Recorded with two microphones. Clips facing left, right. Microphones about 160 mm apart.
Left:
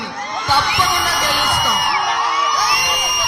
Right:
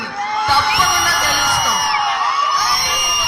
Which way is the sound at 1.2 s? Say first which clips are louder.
Even; 10° left (ahead or behind).